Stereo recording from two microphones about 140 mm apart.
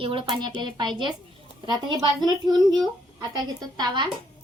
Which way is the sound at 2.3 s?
30° right (ahead or behind).